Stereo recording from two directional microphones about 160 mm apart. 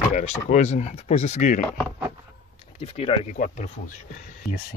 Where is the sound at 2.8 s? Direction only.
35° left (ahead or behind).